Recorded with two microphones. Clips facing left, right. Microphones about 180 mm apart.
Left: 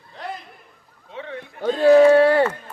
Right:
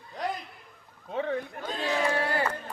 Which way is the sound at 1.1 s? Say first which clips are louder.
Right 4 dB; 45° right (ahead or behind).